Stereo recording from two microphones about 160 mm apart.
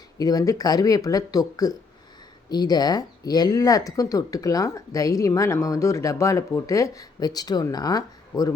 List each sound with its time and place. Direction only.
0.2 s speech: 25° left (ahead or behind)